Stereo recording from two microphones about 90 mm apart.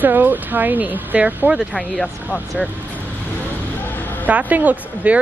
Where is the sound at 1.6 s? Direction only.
Centre (ahead or behind).